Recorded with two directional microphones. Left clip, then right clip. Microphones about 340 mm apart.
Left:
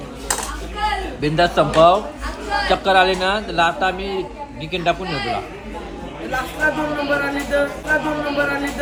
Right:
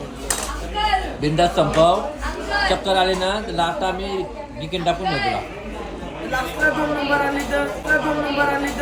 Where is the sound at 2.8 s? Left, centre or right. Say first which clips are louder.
Left 3 dB; centre.